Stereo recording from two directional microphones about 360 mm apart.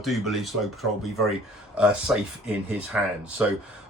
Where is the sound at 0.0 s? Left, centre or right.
Centre.